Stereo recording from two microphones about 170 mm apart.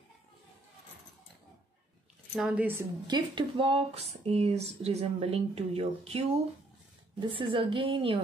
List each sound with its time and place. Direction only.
2.3 s speech: 5° right (ahead or behind)
3.1 s a woman's voice: 30° right (ahead or behind)